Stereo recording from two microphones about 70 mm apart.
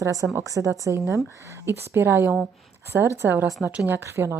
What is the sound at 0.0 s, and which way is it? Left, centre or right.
A woman's voice, right.